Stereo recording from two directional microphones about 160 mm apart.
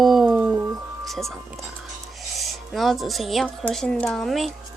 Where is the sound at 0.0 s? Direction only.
Centre (ahead or behind).